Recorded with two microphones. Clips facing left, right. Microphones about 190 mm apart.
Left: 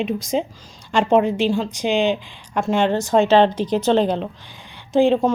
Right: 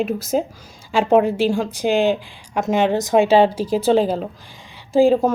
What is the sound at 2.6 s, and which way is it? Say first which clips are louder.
A woman's voice: right 1 dB; 15° right (ahead or behind).